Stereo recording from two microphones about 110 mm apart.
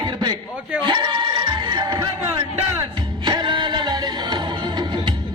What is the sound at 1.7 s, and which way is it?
Music, 40° right (ahead or behind).